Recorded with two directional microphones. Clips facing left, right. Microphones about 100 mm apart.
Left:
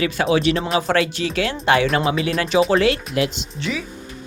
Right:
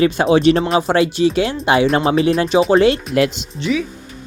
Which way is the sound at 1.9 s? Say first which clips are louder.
Right 5 dB; 35° right (ahead or behind).